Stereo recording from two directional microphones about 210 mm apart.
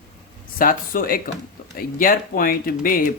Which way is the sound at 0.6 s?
40° left (ahead or behind).